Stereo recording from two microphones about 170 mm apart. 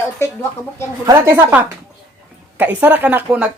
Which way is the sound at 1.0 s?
20° right (ahead or behind).